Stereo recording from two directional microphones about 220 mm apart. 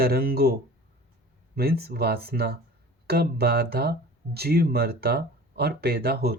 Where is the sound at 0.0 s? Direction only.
45° right (ahead or behind).